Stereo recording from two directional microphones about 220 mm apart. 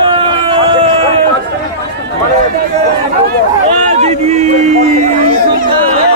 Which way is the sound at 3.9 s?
30° right (ahead or behind).